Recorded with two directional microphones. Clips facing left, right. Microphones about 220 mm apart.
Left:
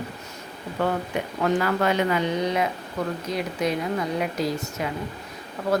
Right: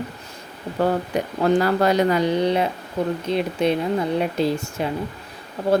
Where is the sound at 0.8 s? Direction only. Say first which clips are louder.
Right 4 dB; 35° right (ahead or behind).